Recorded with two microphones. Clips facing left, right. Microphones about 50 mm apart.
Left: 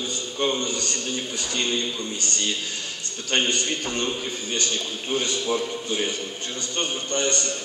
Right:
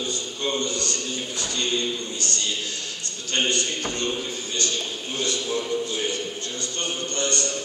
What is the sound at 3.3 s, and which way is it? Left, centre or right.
Speech, left.